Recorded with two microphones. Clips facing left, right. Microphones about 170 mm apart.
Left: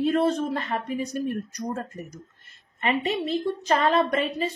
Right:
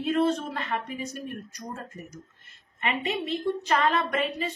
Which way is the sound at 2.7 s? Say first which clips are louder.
Left 4 dB; 35° left (ahead or behind).